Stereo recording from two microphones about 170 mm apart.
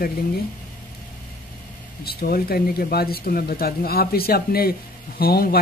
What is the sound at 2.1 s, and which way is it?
Speech, 60° left (ahead or behind).